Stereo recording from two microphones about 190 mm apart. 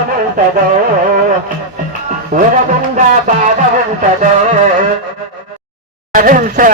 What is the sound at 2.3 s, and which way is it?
Speech, 50° right (ahead or behind).